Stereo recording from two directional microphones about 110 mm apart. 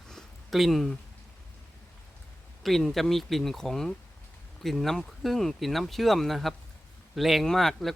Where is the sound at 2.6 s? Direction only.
Centre (ahead or behind).